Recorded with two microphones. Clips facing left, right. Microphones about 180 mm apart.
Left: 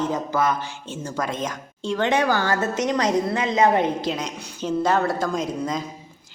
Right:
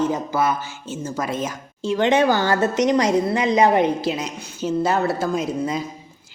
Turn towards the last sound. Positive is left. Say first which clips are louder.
# right 2 dB
turn(degrees=-5)  # may be behind; listen again after turning